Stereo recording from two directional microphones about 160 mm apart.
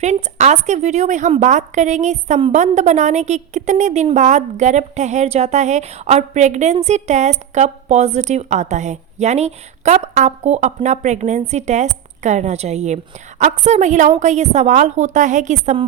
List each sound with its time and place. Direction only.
0.0 s a woman's voice: 45° right (ahead or behind)